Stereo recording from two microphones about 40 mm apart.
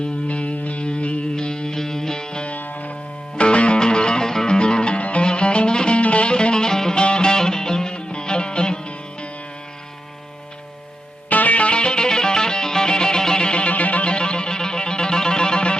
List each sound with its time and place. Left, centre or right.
0.0 s music: left
1.4 s music: left
2.5 s music: left
3.3 s music: left
11.3 s music: left